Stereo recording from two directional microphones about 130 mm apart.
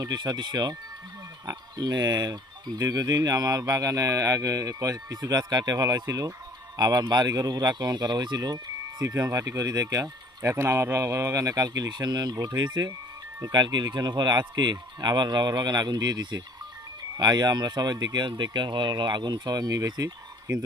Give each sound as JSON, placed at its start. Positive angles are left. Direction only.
{"t": 0.0, "sound": "speech", "side_deg": -30}